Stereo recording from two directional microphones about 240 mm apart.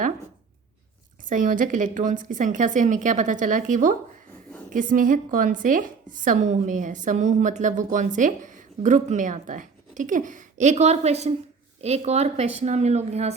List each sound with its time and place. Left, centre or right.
1.3 s a woman's voice: right